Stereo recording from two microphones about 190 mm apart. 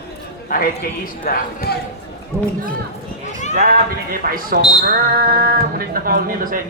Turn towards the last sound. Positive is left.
turn(degrees=-50)  # may be behind; listen again after turning